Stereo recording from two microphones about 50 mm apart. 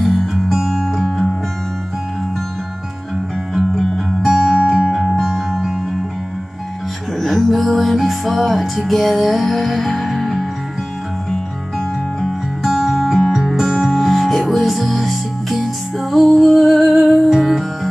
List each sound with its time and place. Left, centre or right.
0.0 s music: centre
4.2 s music: centre
7.2 s music: centre
12.2 s music: centre